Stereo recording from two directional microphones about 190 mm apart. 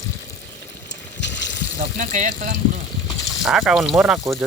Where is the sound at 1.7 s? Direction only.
45° right (ahead or behind).